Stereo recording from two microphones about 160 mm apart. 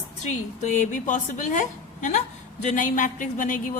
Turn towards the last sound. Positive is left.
turn(degrees=55)  # may be behind; listen again after turning